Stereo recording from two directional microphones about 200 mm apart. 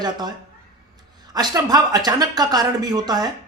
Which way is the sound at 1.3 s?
20° right (ahead or behind).